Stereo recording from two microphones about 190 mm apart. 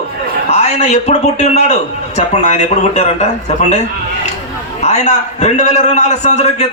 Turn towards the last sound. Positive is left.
turn(degrees=35)  # may be behind; listen again after turning